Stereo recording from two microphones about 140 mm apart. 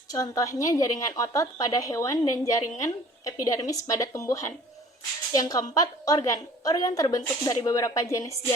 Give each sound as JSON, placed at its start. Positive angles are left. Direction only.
{"t": 0.1, "sound": "a woman's voice", "side_deg": 25}